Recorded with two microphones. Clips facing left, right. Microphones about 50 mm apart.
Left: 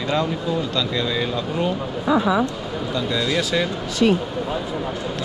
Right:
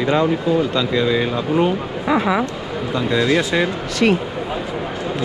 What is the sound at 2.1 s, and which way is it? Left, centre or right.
Speech, right.